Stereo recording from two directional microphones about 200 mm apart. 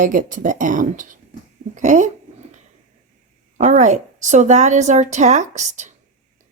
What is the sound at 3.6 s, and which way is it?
A woman's voice, 35° right (ahead or behind).